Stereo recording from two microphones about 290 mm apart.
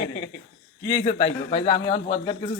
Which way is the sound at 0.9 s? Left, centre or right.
Centre.